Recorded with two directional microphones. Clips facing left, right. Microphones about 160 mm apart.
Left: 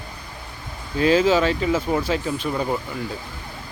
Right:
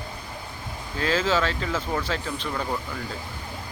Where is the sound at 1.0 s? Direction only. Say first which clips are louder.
Left 7 dB; 15° left (ahead or behind).